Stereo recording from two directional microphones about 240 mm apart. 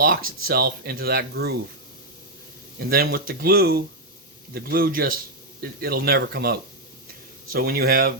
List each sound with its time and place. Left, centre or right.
0.4 s speech: right
2.7 s speech: right